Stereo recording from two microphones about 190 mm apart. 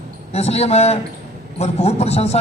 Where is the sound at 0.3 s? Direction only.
35° left (ahead or behind).